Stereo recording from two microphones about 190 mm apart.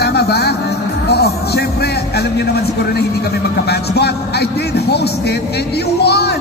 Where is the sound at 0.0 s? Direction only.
55° left (ahead or behind).